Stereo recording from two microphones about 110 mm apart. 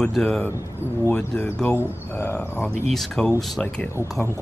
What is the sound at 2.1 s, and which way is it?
Speech, 20° left (ahead or behind).